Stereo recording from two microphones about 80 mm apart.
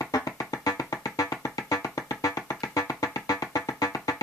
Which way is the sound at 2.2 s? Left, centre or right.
Left.